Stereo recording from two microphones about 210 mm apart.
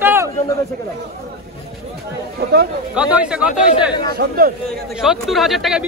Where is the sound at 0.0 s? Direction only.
10° right (ahead or behind).